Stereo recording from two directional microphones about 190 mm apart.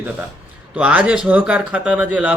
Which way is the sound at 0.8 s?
5° right (ahead or behind).